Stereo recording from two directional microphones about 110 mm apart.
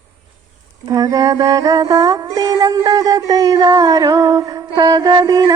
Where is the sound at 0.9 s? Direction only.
35° right (ahead or behind).